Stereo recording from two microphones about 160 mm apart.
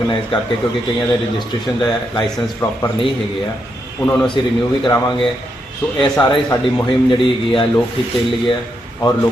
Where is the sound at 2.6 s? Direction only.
15° left (ahead or behind).